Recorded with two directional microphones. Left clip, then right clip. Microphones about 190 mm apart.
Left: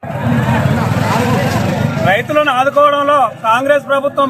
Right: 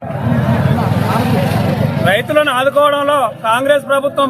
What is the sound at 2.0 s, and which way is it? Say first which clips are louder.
A man's voice: even; 30° right (ahead or behind).